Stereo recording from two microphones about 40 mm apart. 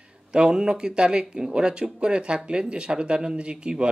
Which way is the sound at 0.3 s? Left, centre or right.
Right.